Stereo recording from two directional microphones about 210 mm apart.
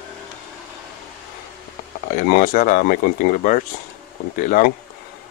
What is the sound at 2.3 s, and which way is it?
Speech, 40° left (ahead or behind).